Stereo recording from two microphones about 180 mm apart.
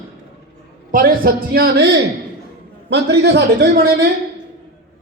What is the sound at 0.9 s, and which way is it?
A man's voice, 55° right (ahead or behind).